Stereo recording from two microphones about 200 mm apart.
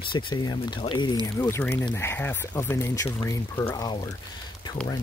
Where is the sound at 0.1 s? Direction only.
20° left (ahead or behind).